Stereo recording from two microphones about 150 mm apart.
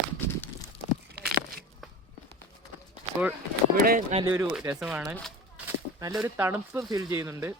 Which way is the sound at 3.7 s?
75° right (ahead or behind).